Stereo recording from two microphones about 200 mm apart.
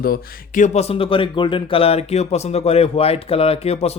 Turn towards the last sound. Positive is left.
turn(degrees=30)  # may be behind; listen again after turning